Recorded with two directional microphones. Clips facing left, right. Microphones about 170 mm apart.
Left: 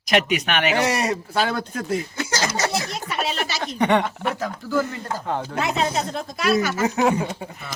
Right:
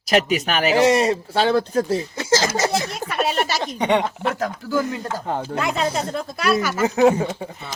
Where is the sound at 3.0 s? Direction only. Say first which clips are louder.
Right 4 dB; 50° right (ahead or behind).